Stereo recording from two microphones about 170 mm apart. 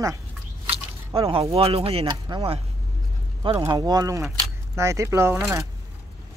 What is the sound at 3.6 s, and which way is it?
Speech, 20° right (ahead or behind).